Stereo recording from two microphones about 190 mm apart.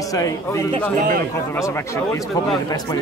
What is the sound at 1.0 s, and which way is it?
Speech, 45° right (ahead or behind).